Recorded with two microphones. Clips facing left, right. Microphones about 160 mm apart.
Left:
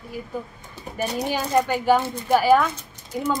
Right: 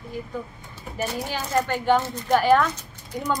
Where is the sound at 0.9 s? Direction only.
15° left (ahead or behind).